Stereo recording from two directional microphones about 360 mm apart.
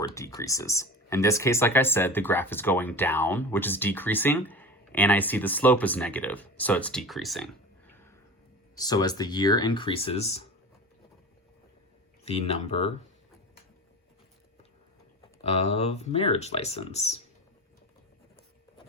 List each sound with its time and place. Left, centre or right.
0.1 s speech: centre
12.2 s speech: centre
15.4 s speech: centre